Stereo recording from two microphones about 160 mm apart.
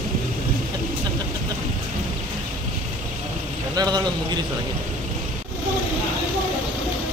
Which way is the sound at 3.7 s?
25° right (ahead or behind).